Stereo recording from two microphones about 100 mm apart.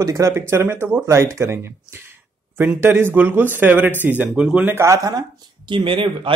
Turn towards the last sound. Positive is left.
turn(degrees=-60)  # may be behind; listen again after turning